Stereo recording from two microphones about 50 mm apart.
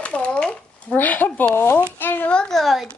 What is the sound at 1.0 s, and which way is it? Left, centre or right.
Speech, left.